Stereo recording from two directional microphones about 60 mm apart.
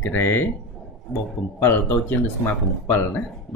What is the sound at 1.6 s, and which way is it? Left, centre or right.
Speech, left.